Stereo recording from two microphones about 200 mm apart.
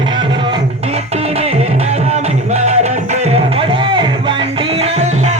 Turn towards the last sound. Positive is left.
turn(degrees=-35)  # may be behind; listen again after turning